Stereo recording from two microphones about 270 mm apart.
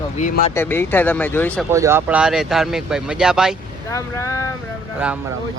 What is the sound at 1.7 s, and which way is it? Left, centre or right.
Speech, centre.